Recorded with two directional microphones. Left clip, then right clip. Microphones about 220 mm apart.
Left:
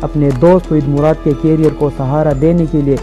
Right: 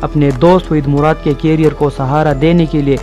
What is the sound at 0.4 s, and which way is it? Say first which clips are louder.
A man's voice: left 1 dB; 25° right (ahead or behind).